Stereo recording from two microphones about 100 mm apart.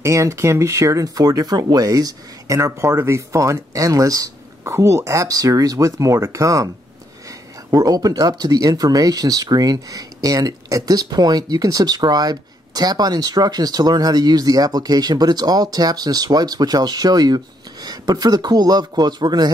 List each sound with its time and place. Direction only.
0.0 s speech: 30° right (ahead or behind)